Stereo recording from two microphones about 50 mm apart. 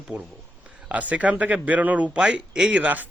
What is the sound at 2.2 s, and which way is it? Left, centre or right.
Speech, centre.